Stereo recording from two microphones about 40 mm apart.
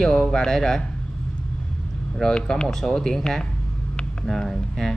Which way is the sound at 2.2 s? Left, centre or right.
Centre.